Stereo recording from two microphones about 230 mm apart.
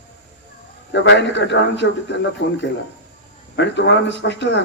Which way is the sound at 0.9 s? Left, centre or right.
Left.